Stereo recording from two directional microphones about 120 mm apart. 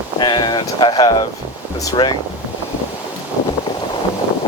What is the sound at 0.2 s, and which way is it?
Speech, 35° left (ahead or behind).